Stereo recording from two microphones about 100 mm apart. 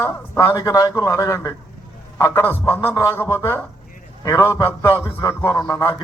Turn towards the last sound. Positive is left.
turn(degrees=10)  # may be behind; listen again after turning